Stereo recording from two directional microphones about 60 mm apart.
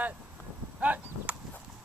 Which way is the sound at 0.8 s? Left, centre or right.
Right.